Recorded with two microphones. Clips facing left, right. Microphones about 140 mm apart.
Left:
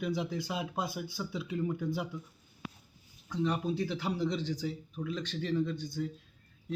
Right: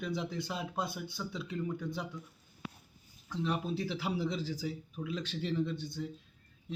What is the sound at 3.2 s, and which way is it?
Speech, centre (ahead or behind).